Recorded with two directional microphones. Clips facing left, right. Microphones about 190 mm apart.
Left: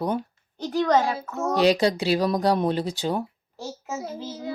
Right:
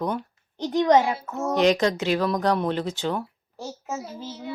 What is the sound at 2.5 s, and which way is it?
Speech, 10° left (ahead or behind).